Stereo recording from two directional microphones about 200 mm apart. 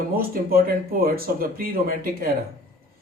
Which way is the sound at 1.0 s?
45° right (ahead or behind).